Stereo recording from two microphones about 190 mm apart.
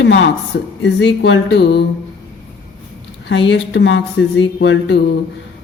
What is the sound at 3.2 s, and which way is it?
Speech, 70° left (ahead or behind).